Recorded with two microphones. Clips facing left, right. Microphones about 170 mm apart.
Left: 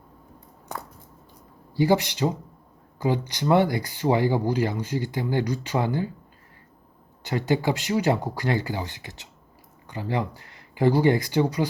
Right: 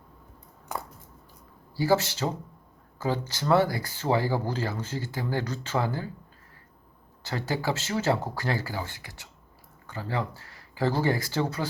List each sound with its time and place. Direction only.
1.7 s speech: 20° left (ahead or behind)
7.2 s speech: 20° left (ahead or behind)